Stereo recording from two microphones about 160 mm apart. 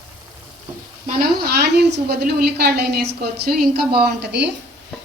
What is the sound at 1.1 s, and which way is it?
A woman's voice, 70° right (ahead or behind).